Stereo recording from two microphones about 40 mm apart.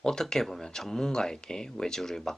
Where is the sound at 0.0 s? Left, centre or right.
Centre.